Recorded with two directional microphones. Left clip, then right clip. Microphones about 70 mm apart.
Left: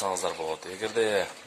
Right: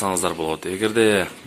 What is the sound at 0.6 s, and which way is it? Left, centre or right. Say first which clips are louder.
Speech: right 9 dB; left.